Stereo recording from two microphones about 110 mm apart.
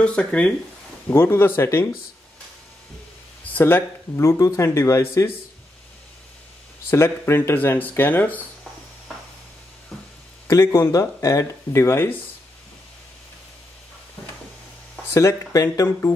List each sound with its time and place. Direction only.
0.0 s speech: 10° left (ahead or behind)
3.5 s speech: 20° left (ahead or behind)
6.9 s speech: 20° left (ahead or behind)
10.5 s speech: 30° left (ahead or behind)
15.1 s speech: 25° left (ahead or behind)